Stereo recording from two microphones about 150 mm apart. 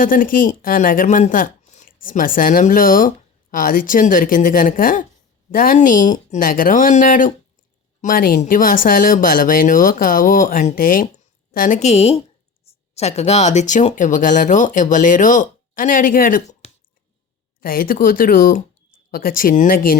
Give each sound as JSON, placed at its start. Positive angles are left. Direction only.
{"t": 0.0, "sound": "a woman's voice", "side_deg": 65}
{"t": 17.6, "sound": "speech", "side_deg": 75}